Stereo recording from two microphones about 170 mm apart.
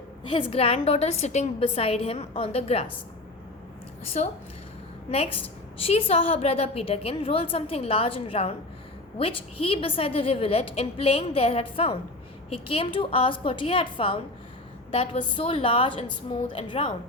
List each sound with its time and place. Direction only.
0.3 s a woman's voice: 30° left (ahead or behind)
4.1 s a woman's voice: 40° left (ahead or behind)